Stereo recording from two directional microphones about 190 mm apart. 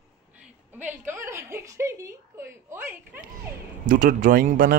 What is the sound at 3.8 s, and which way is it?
Speech, 45° right (ahead or behind).